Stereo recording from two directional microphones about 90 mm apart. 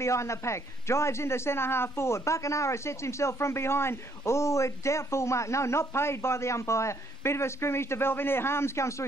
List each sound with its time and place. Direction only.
0.0 s a man's voice: 35° left (ahead or behind)